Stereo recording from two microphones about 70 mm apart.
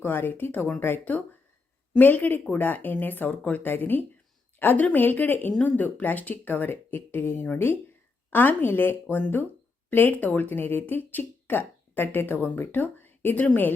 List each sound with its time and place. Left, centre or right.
0.0 s speech: left